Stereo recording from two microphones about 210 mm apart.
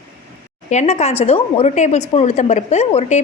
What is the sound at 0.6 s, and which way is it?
Speech, 35° left (ahead or behind).